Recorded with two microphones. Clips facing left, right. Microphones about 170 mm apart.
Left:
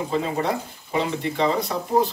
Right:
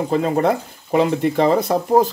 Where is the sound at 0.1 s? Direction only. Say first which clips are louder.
Right 7 dB; 50° right (ahead or behind).